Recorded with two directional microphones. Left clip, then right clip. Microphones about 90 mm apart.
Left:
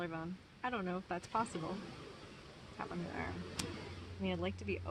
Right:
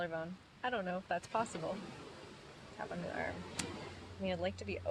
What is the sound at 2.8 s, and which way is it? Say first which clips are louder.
Speech: right 2 dB; 40° right (ahead or behind).